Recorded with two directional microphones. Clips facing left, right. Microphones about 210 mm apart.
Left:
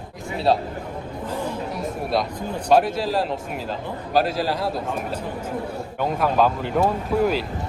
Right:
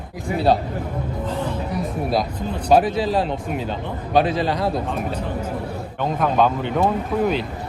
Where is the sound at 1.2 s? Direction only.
10° left (ahead or behind).